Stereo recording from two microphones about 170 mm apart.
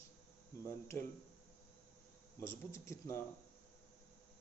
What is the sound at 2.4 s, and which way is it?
Speech, 15° left (ahead or behind).